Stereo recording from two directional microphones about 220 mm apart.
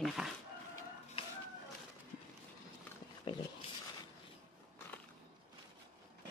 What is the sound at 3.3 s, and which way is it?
Speech, 20° left (ahead or behind).